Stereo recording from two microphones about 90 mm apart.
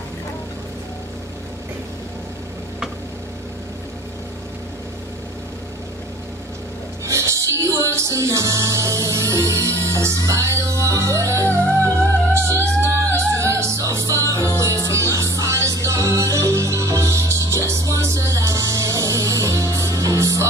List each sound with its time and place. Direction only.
7.1 s music: 35° right (ahead or behind)